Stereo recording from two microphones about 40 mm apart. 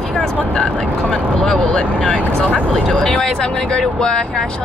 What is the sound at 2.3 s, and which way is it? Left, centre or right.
Speech, left.